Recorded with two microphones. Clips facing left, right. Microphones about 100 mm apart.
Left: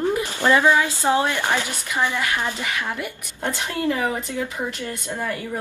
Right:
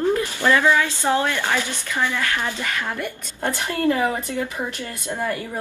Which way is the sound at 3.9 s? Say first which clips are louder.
Right 3 dB; 10° right (ahead or behind).